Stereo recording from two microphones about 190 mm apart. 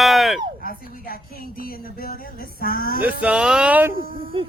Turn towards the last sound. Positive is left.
turn(degrees=-25)  # may be behind; listen again after turning